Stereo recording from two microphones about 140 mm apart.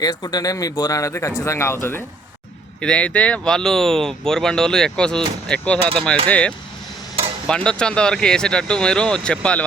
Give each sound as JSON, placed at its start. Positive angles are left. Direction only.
{"t": 0.0, "sound": "speech", "side_deg": 25}
{"t": 2.8, "sound": "speech", "side_deg": 10}